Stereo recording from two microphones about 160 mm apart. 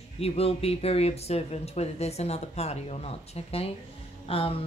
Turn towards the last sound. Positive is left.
turn(degrees=35)  # may be behind; listen again after turning